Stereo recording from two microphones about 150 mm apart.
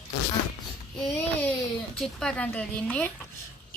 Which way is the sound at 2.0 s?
5° left (ahead or behind).